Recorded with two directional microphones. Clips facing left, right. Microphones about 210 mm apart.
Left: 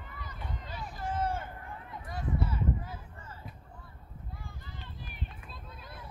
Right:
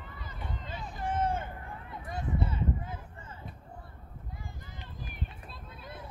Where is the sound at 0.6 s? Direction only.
20° right (ahead or behind).